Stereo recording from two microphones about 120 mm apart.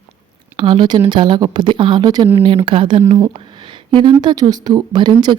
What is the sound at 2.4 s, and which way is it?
Speech, 50° right (ahead or behind).